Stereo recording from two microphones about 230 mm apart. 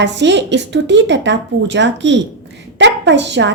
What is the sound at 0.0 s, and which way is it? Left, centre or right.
A woman's voice, right.